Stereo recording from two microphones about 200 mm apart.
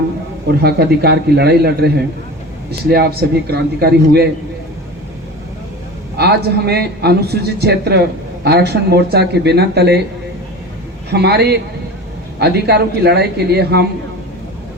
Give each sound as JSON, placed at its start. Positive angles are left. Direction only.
{"t": 0.6, "sound": "a man's voice", "side_deg": -55}
{"t": 2.9, "sound": "a man's voice", "side_deg": -50}
{"t": 6.1, "sound": "a man's voice", "side_deg": -55}
{"t": 11.1, "sound": "a man's voice", "side_deg": -55}